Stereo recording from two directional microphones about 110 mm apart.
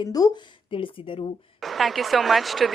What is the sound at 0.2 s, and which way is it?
Speech, 35° left (ahead or behind).